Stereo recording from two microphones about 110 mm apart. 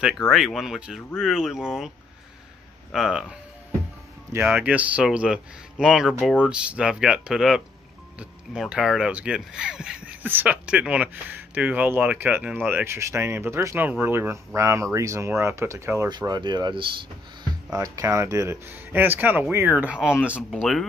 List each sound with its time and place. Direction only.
0.3 s speech: centre (ahead or behind)
2.9 s speech: 5° right (ahead or behind)
4.6 s speech: 15° right (ahead or behind)
16.1 s speech: 40° right (ahead or behind)
17.7 s speech: 30° right (ahead or behind)
18.7 s speech: 15° right (ahead or behind)